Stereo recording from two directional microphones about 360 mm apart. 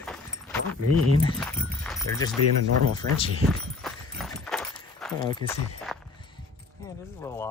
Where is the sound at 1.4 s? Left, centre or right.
Centre.